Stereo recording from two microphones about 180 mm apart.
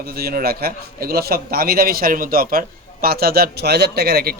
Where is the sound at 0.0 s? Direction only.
60° right (ahead or behind).